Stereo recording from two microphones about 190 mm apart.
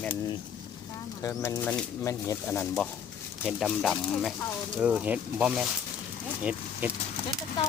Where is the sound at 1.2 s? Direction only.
15° left (ahead or behind); by 6.9 s 5° right (ahead or behind).